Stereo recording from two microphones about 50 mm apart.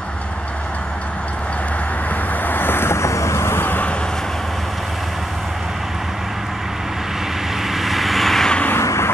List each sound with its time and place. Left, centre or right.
2.4 s vehicle: left
7.8 s vehicle: centre
8.7 s a sound: left